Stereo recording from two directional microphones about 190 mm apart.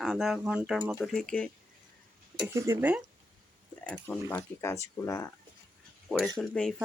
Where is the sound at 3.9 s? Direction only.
10° left (ahead or behind).